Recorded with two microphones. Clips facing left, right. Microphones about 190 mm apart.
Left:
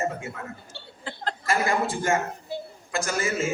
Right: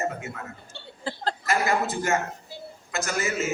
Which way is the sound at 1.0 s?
35° right (ahead or behind).